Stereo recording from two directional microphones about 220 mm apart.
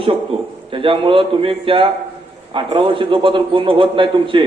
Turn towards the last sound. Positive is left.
turn(degrees=-25)  # may be behind; listen again after turning